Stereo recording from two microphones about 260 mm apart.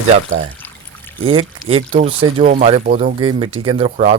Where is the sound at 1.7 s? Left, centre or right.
Right.